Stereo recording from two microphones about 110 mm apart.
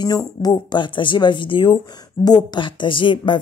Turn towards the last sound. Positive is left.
turn(degrees=50)  # may be behind; listen again after turning